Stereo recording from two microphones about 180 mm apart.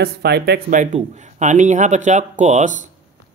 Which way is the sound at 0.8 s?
40° right (ahead or behind).